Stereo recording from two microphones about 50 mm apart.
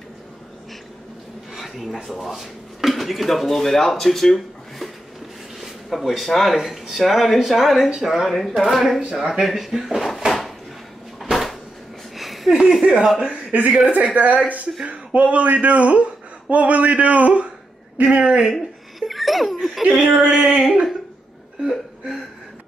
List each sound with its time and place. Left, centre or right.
1.5 s a sound: centre
2.0 s speech: centre
11.1 s cupboard open or close: centre
12.2 s a sound: centre
12.8 s a woman's voice: centre
18.4 s laughter: centre
19.9 s speech: right